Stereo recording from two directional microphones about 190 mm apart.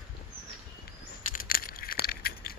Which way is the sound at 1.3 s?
50° left (ahead or behind).